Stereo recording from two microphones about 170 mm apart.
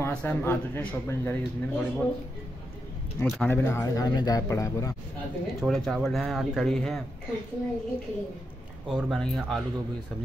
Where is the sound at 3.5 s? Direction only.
15° left (ahead or behind).